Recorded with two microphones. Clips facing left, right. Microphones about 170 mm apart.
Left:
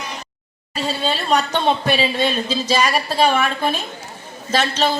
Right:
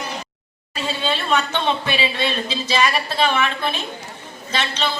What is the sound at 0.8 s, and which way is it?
A woman's voice, 40° left (ahead or behind).